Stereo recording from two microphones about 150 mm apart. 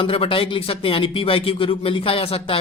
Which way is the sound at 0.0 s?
35° left (ahead or behind).